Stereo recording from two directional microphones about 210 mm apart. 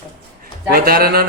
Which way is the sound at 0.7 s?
45° right (ahead or behind).